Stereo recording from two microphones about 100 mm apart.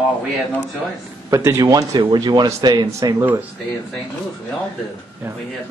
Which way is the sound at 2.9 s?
30° right (ahead or behind).